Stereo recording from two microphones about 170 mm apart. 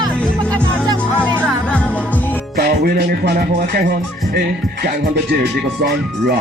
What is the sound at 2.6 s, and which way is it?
Music, 65° right (ahead or behind).